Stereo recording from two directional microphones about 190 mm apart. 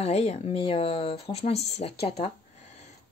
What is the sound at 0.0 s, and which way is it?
Speech, 35° left (ahead or behind).